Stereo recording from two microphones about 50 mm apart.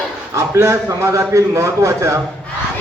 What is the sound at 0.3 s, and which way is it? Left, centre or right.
A man's voice, right.